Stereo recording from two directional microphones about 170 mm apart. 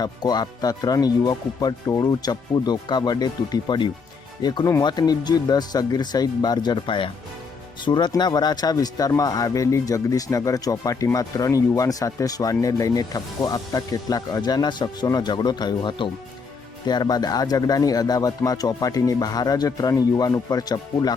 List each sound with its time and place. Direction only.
0.0 s speech: 25° left (ahead or behind)